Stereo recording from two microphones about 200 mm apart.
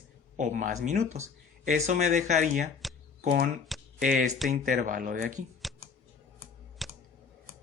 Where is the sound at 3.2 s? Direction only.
45° right (ahead or behind).